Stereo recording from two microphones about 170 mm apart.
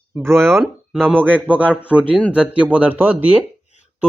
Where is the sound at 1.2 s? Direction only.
5° left (ahead or behind).